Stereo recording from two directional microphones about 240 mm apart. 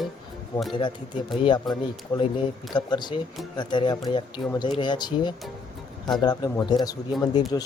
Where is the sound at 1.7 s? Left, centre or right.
Centre.